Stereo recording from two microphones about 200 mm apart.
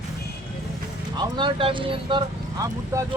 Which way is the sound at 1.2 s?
25° right (ahead or behind).